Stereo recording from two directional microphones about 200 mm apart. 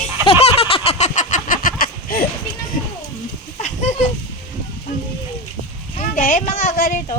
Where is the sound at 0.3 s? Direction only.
30° left (ahead or behind); by 2.2 s 45° left (ahead or behind).